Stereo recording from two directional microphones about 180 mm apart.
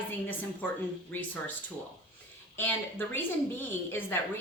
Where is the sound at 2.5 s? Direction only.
10° left (ahead or behind).